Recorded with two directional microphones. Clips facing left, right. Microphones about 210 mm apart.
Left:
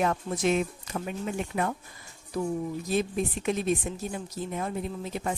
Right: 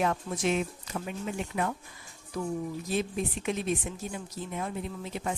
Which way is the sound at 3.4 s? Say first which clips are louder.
Left 4 dB; 40° left (ahead or behind).